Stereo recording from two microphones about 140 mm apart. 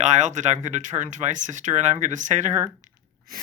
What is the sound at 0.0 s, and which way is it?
Speech, 60° right (ahead or behind).